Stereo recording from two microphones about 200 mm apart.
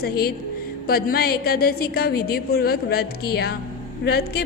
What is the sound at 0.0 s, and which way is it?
A woman's voice, 50° left (ahead or behind).